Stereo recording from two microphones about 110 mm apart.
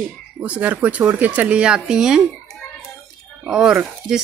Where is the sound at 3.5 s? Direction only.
5° right (ahead or behind).